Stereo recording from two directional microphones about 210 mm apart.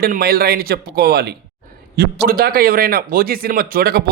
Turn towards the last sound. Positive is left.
turn(degrees=-45)  # may be behind; listen again after turning